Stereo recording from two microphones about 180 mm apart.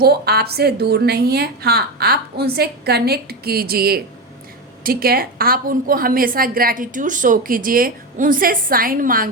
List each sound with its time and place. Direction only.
0.0 s a woman's voice: 60° right (ahead or behind)